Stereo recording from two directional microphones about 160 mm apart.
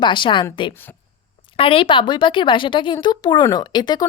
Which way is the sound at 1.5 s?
35° left (ahead or behind).